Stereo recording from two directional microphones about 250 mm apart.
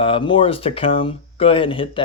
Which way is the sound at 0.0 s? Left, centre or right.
Centre.